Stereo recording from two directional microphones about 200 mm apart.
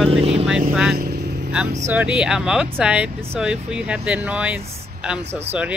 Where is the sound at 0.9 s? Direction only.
55° right (ahead or behind).